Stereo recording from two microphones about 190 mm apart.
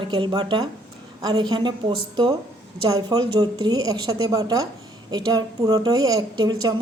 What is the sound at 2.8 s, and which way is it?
A woman's voice, 20° right (ahead or behind).